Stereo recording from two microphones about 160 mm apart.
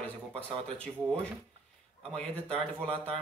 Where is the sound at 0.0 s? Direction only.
10° left (ahead or behind).